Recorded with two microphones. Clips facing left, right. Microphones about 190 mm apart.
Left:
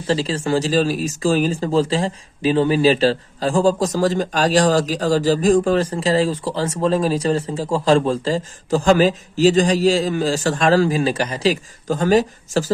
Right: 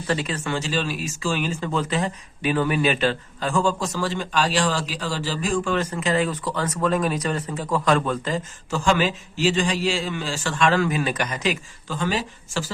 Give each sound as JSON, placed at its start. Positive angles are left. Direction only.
{"t": 0.1, "sound": "speech", "side_deg": 30}